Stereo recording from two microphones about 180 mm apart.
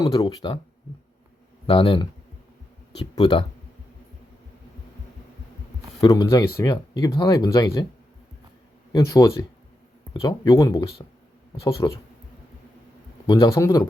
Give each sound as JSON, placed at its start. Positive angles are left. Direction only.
{"t": 0.0, "sound": "speech", "side_deg": 20}
{"t": 1.6, "sound": "speech", "side_deg": 30}
{"t": 3.2, "sound": "speech", "side_deg": 25}
{"t": 6.0, "sound": "speech", "side_deg": 20}
{"t": 8.9, "sound": "speech", "side_deg": 20}
{"t": 13.2, "sound": "speech", "side_deg": 30}
{"t": 13.6, "sound": "speech", "side_deg": 20}